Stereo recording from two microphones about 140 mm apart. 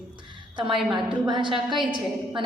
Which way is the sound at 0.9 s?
35° right (ahead or behind).